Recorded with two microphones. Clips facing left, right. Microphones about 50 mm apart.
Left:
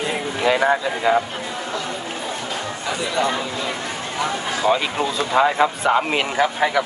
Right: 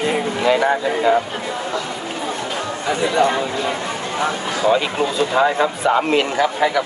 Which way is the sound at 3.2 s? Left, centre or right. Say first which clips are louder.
Right 4 dB; right.